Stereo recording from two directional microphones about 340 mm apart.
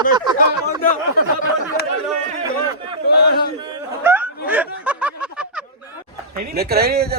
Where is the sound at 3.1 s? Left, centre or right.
Left.